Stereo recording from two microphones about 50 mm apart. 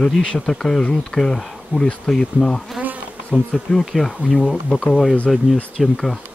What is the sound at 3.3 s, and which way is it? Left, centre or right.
Bee, centre.